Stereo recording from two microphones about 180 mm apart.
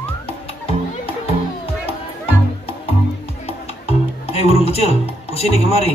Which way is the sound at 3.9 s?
35° left (ahead or behind).